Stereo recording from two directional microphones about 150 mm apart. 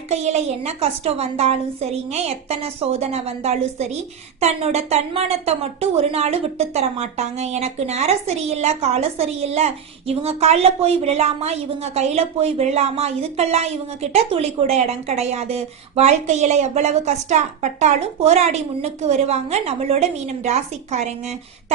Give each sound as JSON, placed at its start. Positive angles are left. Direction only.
{"t": 0.1, "sound": "a woman's voice", "side_deg": -50}